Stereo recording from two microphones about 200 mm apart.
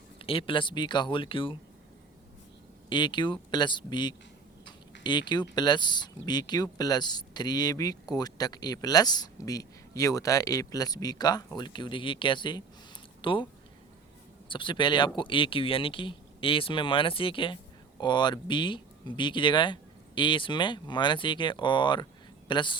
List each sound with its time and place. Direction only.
0.2 s speech: 25° left (ahead or behind)
2.9 s speech: 25° left (ahead or behind)